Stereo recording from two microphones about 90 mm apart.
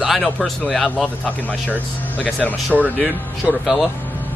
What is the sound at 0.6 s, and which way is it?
Speech, 10° left (ahead or behind).